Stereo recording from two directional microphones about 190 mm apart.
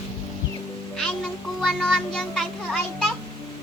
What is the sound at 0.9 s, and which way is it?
Music, centre (ahead or behind).